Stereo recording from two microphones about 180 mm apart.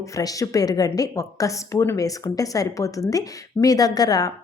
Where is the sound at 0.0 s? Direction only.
20° left (ahead or behind).